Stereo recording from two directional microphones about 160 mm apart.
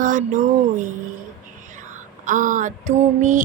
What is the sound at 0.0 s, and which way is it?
Speech, 50° right (ahead or behind).